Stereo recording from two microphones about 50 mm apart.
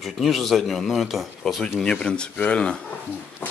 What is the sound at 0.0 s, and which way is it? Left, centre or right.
Speech, centre.